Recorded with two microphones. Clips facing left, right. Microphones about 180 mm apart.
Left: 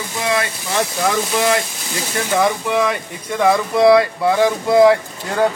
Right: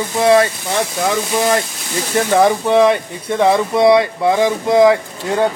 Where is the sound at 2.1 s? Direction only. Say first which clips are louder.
Right 5 dB; 35° right (ahead or behind).